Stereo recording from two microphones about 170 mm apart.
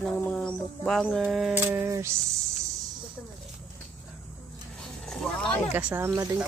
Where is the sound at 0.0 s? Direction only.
5° left (ahead or behind).